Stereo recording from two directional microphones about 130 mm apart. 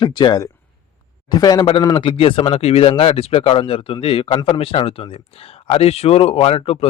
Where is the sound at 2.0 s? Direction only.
45° left (ahead or behind).